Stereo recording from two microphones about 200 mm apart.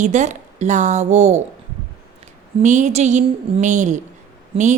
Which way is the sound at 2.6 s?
40° right (ahead or behind).